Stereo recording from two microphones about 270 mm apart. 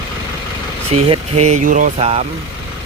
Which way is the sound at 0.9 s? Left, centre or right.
Right.